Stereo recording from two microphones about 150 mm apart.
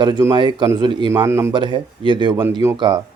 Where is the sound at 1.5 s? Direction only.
30° right (ahead or behind).